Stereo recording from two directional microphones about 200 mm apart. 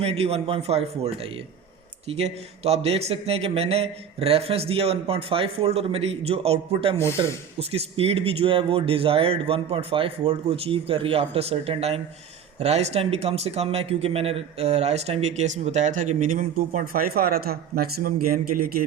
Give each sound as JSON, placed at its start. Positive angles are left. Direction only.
{"t": 0.0, "sound": "speech", "side_deg": -30}
{"t": 6.9, "sound": "speech", "side_deg": 10}
{"t": 7.2, "sound": "speech", "side_deg": -30}